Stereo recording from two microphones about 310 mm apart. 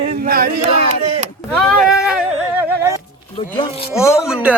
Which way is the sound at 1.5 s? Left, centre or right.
Centre.